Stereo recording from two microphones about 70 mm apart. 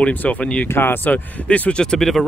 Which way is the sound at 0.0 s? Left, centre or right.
Left.